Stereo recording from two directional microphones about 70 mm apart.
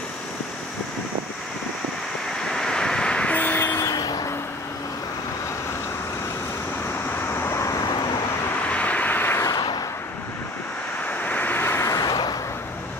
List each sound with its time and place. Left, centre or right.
2.4 s vehicle: centre; by 3.8 s left
3.9 s vehicle: left
7.2 s vehicle: left
8.6 s vehicle: centre
9.6 s vehicle: left
11.1 s vehicle: left
12.1 s vehicle: left